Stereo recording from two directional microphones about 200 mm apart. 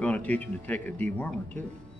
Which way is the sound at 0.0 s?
5° left (ahead or behind).